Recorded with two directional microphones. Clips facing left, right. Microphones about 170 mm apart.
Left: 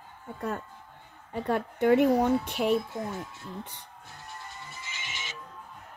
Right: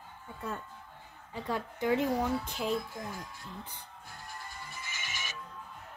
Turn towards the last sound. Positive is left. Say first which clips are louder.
# left 1 dB
turn(degrees=20)  # may be behind; listen again after turning